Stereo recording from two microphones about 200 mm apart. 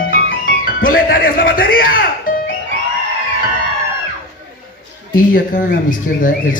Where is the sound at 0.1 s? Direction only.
45° left (ahead or behind).